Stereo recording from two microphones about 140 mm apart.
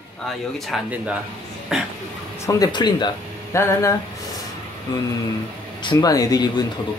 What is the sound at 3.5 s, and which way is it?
Speech, 20° left (ahead or behind).